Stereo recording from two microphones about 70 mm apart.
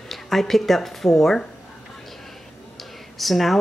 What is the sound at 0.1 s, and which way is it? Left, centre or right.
Speech, centre.